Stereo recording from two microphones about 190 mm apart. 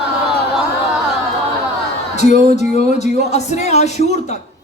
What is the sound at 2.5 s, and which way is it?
Speech, 35° left (ahead or behind).